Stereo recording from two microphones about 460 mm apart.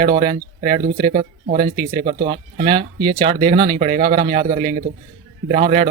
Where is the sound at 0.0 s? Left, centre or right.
Centre.